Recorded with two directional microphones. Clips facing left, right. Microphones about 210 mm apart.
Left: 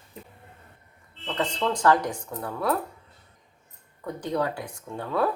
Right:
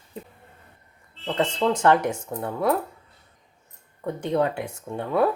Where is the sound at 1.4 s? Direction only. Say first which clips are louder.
Right 4 dB; 25° right (ahead or behind).